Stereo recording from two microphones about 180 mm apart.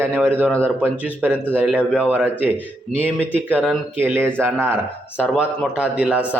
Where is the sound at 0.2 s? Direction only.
5° left (ahead or behind).